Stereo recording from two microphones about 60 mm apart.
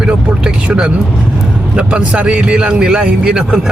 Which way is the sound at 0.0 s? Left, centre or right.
Centre.